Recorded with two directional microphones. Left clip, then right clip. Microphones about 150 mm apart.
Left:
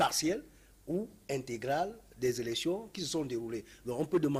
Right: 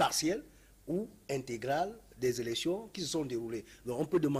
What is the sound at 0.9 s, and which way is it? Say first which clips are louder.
Speech: even; 55° left (ahead or behind).